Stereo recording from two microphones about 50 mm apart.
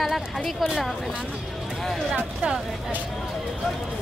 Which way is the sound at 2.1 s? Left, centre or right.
Right.